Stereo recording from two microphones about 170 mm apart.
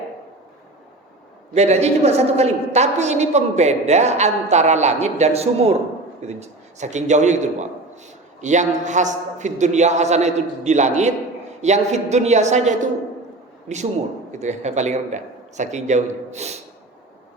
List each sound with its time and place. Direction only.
1.5 s a woman's voice: 40° right (ahead or behind)